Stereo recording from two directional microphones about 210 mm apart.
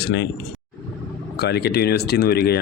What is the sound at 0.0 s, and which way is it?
Speech, 55° left (ahead or behind).